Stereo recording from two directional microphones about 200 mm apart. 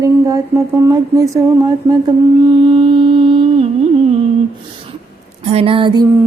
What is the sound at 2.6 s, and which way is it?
Mantra, 25° right (ahead or behind).